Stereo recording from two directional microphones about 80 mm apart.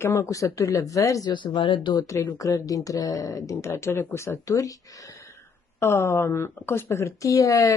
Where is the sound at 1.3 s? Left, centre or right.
Left.